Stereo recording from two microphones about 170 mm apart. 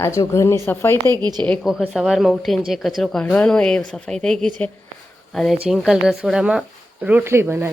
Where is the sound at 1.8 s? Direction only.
Centre (ahead or behind).